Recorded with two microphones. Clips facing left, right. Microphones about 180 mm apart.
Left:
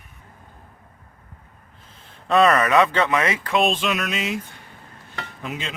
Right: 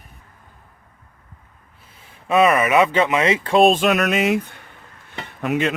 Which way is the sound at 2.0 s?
10° right (ahead or behind).